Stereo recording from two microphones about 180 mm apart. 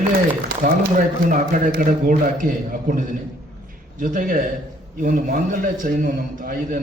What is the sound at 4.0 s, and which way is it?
A man's voice, 50° right (ahead or behind).